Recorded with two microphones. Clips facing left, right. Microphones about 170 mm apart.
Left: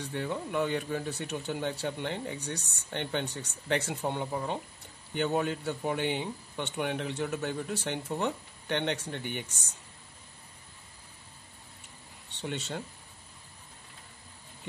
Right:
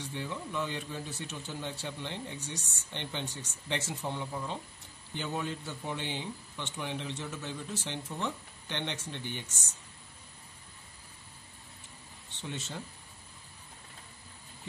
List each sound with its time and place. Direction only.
0.0 s speech: 55° left (ahead or behind)
12.4 s speech: 70° left (ahead or behind)